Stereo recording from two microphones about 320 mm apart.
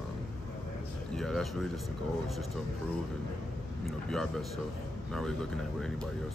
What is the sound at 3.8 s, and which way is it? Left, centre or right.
Speech, centre.